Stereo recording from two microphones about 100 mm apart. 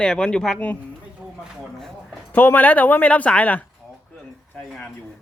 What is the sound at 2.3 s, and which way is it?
Speech, 20° left (ahead or behind).